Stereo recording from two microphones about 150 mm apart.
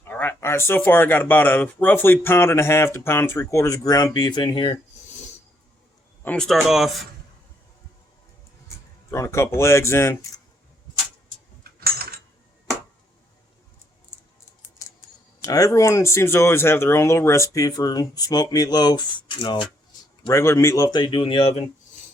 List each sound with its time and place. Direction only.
0.0 s speech: 15° left (ahead or behind); by 4.8 s 30° left (ahead or behind)
6.2 s speech: 5° left (ahead or behind)
8.6 s speech: 20° left (ahead or behind)
11.6 s a sound: 90° right
15.4 s speech: 25° left (ahead or behind)
20.3 s speech: 20° left (ahead or behind); by 21.6 s 40° left (ahead or behind)